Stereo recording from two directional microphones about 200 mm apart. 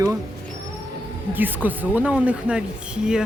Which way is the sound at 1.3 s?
10° right (ahead or behind).